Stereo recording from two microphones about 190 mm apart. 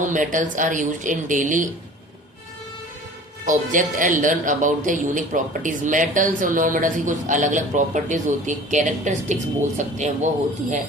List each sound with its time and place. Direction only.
0.0 s speech: 45° right (ahead or behind)
3.4 s speech: 45° right (ahead or behind)